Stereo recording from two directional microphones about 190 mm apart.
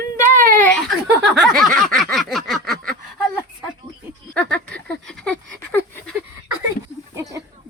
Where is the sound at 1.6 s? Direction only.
Centre (ahead or behind).